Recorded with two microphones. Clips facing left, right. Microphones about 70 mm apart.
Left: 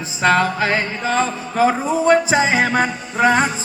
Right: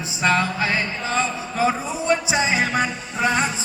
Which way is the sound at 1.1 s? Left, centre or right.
Left.